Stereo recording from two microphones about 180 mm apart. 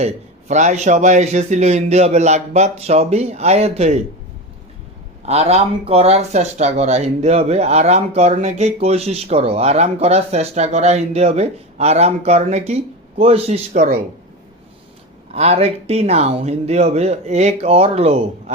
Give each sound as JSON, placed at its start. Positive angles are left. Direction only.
{"t": 0.0, "sound": "speech", "side_deg": -40}
{"t": 5.2, "sound": "speech", "side_deg": -35}
{"t": 13.7, "sound": "speech", "side_deg": -50}
{"t": 15.3, "sound": "speech", "side_deg": -35}